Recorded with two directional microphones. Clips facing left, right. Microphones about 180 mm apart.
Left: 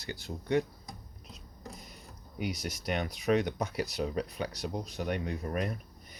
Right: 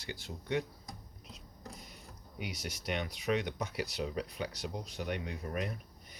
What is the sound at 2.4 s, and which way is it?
Speech, 40° left (ahead or behind).